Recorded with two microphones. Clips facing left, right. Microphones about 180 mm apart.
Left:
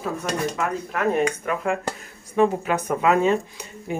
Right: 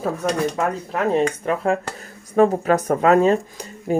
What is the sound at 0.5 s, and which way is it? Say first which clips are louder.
Speech: right 3 dB; 30° right (ahead or behind).